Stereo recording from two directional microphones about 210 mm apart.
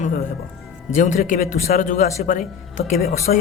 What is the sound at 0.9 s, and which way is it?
A man's voice, 35° left (ahead or behind).